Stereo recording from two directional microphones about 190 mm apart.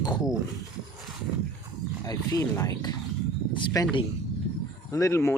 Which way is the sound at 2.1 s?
20° left (ahead or behind).